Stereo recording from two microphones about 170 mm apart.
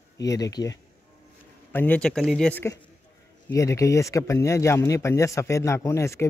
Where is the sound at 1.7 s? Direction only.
10° left (ahead or behind).